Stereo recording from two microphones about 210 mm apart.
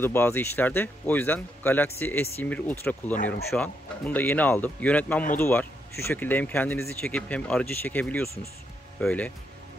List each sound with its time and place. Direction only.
0.0 s speech: 10° left (ahead or behind)